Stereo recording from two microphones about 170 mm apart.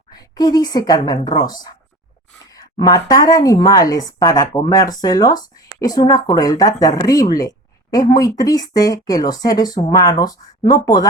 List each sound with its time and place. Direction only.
0.1 s a woman's voice: 25° left (ahead or behind)